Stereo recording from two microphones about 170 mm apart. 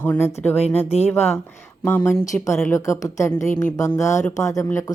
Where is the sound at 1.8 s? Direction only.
15° left (ahead or behind).